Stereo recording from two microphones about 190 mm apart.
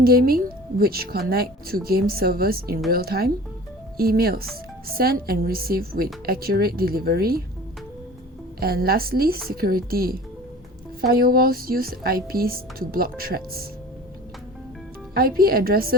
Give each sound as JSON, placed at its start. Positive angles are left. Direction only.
{"t": 0.0, "sound": "speech", "side_deg": -55}
{"t": 8.6, "sound": "speech", "side_deg": -55}
{"t": 15.1, "sound": "speech", "side_deg": -50}